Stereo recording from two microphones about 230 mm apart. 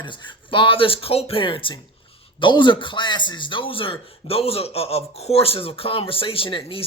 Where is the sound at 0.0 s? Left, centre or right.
Left.